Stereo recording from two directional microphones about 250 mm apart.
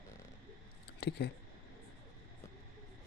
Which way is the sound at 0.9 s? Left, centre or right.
Left.